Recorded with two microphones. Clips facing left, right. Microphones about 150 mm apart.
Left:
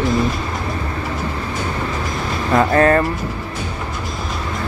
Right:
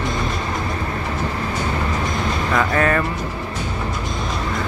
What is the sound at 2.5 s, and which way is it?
Music, 40° left (ahead or behind).